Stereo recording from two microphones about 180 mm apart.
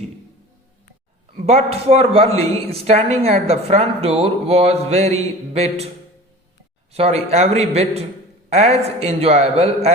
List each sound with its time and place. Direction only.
1.4 s speech: 35° right (ahead or behind)
6.9 s speech: 35° right (ahead or behind)